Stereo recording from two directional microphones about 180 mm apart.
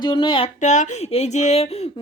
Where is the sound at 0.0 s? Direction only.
25° left (ahead or behind).